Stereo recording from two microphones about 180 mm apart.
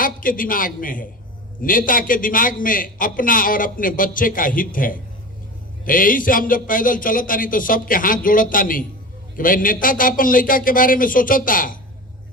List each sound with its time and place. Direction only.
0.0 s a man's voice: 50° left (ahead or behind)